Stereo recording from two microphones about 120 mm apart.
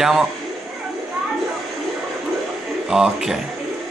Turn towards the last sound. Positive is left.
turn(degrees=-5)  # may be behind; listen again after turning